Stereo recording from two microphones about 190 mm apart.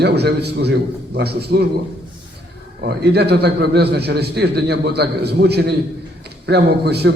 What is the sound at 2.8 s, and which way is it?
A man's voice, 60° right (ahead or behind).